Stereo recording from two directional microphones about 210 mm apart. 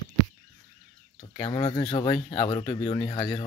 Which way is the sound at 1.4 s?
25° left (ahead or behind).